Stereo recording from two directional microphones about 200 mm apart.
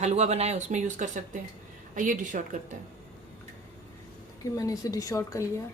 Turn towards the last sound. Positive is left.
turn(degrees=15)  # may be behind; listen again after turning